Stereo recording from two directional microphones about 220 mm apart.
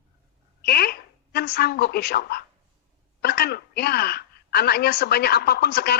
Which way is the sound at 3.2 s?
45° left (ahead or behind).